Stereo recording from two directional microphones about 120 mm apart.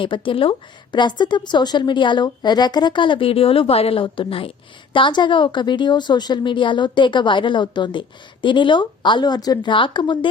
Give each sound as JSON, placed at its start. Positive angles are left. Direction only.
{"t": 0.0, "sound": "a woman's voice", "side_deg": 45}